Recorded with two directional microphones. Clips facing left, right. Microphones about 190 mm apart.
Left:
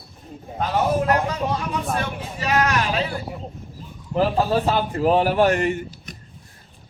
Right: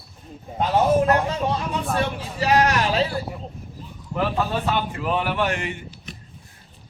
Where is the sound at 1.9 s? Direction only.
35° right (ahead or behind).